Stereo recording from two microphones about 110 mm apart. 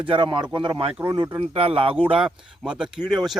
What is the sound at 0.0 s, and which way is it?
Speech, 50° right (ahead or behind).